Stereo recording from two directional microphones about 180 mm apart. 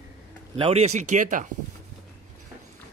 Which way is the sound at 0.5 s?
30° right (ahead or behind).